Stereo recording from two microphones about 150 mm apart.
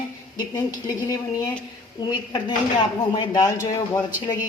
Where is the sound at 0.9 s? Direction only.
25° left (ahead or behind).